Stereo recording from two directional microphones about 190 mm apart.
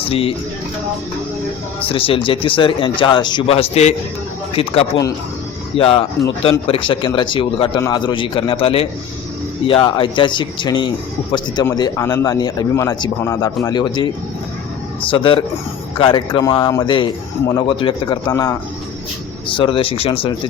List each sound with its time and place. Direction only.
0.1 s speech: 30° left (ahead or behind)
1.9 s speech: 30° left (ahead or behind)
15.1 s speech: 25° left (ahead or behind)